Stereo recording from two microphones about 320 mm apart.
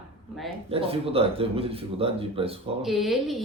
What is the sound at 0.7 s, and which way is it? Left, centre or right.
Speech, centre.